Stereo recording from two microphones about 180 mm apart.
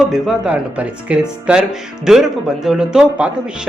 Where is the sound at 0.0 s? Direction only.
Centre (ahead or behind).